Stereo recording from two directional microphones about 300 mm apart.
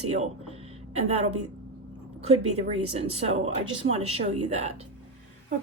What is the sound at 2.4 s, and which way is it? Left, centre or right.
A woman's voice, right.